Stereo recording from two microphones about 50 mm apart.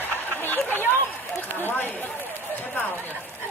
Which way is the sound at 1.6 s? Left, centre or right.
Left.